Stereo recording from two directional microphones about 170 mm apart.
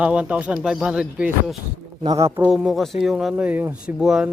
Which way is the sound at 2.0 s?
20° right (ahead or behind).